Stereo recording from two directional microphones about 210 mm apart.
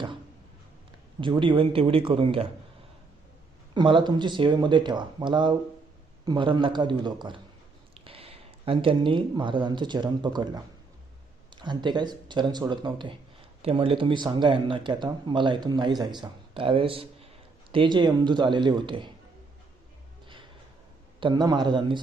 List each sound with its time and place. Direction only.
1.2 s speech: 25° right (ahead or behind)
3.8 s speech: 20° right (ahead or behind)
20.2 s music: 25° right (ahead or behind)
21.2 s speech: 20° right (ahead or behind)